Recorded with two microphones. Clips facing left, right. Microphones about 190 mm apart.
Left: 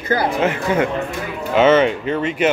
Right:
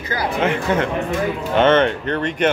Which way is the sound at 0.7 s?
10° left (ahead or behind).